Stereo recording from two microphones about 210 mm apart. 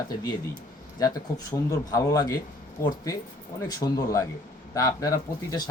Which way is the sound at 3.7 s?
20° left (ahead or behind).